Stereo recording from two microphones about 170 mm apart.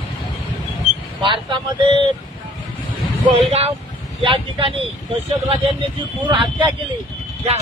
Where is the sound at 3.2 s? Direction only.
35° right (ahead or behind).